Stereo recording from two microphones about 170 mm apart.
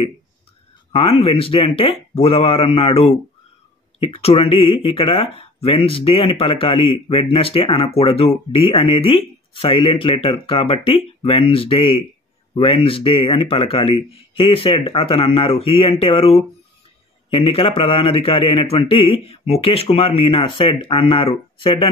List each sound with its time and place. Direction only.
0.9 s a man's voice: 35° left (ahead or behind)